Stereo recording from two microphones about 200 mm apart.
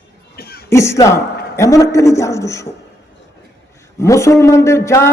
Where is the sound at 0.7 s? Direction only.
15° left (ahead or behind).